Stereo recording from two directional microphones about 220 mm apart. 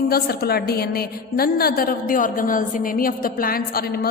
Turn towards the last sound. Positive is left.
turn(degrees=45)  # may be behind; listen again after turning